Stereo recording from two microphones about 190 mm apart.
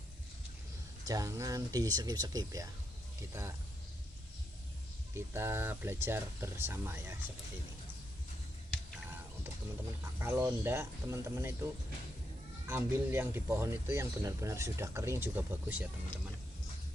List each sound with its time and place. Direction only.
1.0 s speech: 15° right (ahead or behind)
5.1 s speech: 15° right (ahead or behind)
10.2 s speech: 15° right (ahead or behind)
12.6 s speech: 15° right (ahead or behind)